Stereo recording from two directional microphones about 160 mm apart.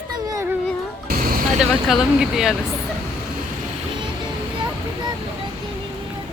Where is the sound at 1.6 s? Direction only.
Centre (ahead or behind).